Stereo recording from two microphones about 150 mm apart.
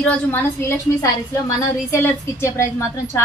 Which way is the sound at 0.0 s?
15° left (ahead or behind).